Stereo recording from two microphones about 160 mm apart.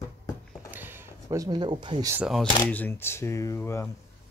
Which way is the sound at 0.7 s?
10° right (ahead or behind).